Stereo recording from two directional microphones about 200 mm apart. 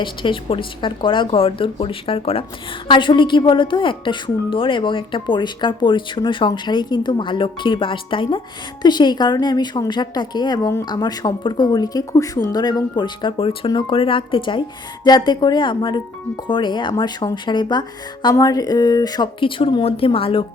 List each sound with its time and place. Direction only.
0.0 s speech: 25° left (ahead or behind)